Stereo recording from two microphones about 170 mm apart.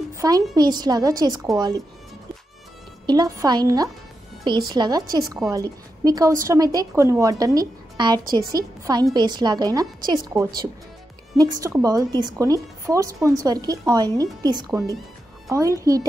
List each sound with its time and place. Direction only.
0.1 s a sound: 20° right (ahead or behind)
0.6 s speech: 25° right (ahead or behind)
3.1 s speech: 20° right (ahead or behind)